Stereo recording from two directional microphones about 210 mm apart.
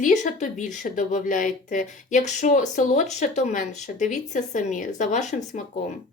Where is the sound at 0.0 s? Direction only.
35° left (ahead or behind).